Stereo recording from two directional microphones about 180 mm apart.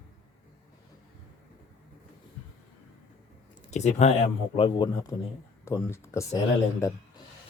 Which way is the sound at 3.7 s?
40° left (ahead or behind).